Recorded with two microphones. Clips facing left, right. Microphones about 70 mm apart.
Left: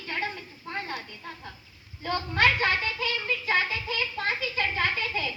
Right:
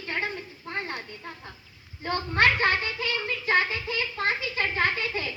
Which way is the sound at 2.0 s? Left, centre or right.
Right.